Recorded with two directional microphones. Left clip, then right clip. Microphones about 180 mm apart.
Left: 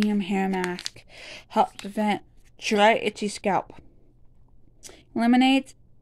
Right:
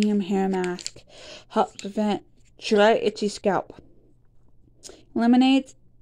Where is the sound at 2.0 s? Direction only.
25° left (ahead or behind).